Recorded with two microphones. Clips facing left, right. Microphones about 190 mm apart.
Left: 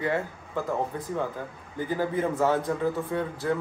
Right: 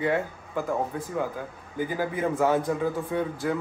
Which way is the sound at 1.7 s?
10° right (ahead or behind).